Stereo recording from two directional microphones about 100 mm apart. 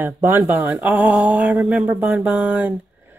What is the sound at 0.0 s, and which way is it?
Speech, 20° right (ahead or behind).